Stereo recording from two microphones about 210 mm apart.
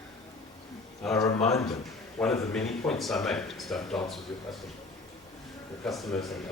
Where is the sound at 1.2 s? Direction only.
30° left (ahead or behind).